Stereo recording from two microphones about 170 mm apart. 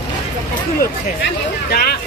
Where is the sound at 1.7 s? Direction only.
65° left (ahead or behind).